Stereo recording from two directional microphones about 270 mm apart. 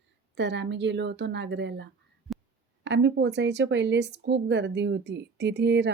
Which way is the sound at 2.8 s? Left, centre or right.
Right.